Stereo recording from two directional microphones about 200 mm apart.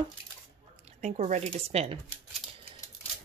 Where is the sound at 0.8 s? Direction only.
35° right (ahead or behind).